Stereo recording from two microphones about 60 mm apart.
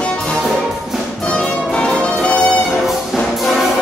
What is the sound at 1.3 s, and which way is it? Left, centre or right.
Music, centre.